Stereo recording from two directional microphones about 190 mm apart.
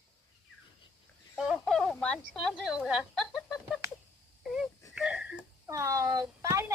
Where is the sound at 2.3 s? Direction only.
Centre (ahead or behind).